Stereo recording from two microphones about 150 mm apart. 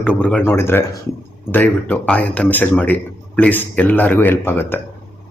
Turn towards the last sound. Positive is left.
turn(degrees=15)  # may be behind; listen again after turning